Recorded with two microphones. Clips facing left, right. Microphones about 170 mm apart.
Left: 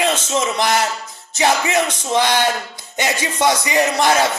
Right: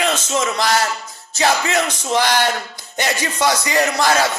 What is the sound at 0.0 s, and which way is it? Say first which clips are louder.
Speech: left 1 dB; 25° left (ahead or behind).